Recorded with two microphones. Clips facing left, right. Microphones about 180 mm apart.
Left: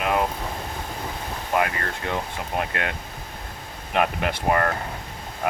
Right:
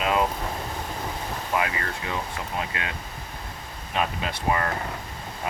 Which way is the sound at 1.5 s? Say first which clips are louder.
Left 3 dB; 60° left (ahead or behind).